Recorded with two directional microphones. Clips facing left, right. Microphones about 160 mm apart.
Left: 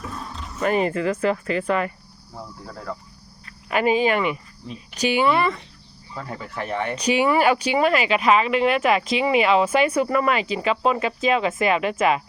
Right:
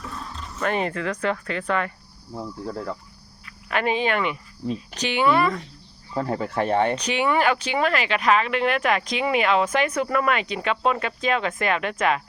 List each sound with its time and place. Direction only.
0.3 s speech: 5° left (ahead or behind)
3.7 s speech: 5° left (ahead or behind)
6.1 s speech: 35° right (ahead or behind)
6.9 s speech: 10° left (ahead or behind)